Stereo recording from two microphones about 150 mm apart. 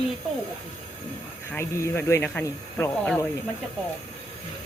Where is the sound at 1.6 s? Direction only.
20° left (ahead or behind).